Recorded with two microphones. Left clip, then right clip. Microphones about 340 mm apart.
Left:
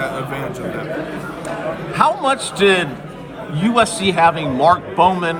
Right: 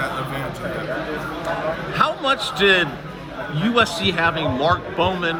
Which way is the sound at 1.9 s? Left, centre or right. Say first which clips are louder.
Left 5 dB; centre.